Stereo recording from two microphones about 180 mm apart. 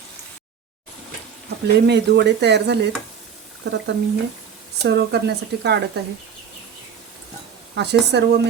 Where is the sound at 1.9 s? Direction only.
70° right (ahead or behind).